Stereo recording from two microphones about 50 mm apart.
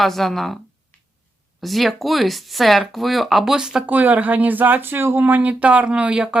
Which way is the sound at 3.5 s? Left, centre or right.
Centre.